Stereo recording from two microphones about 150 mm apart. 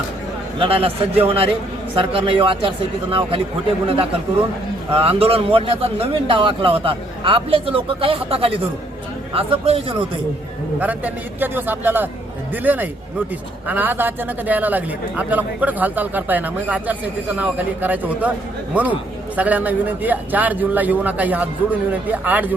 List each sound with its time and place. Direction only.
0.6 s a man's voice: 40° right (ahead or behind)
4.9 s a man's voice: 40° right (ahead or behind)
10.8 s a man's voice: 10° right (ahead or behind)